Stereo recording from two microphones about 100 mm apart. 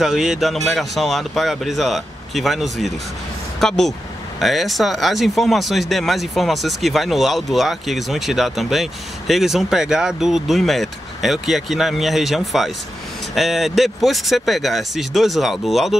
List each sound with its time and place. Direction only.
0.0 s speech: 5° right (ahead or behind)